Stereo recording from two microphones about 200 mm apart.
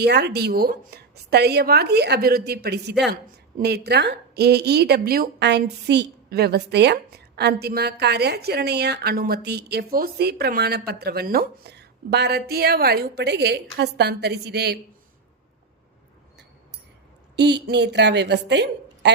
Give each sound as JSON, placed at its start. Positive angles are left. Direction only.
{"t": 0.0, "sound": "a woman's voice", "side_deg": -55}
{"t": 17.3, "sound": "a woman's voice", "side_deg": -60}